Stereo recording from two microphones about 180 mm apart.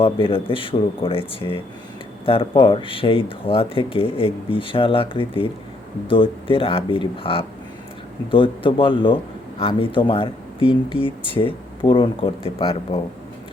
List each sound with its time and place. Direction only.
0.0 s speech: 30° left (ahead or behind)